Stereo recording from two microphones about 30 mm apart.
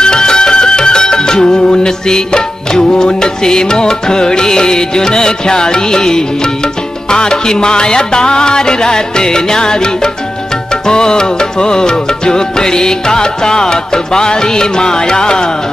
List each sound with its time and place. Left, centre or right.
0.0 s music: left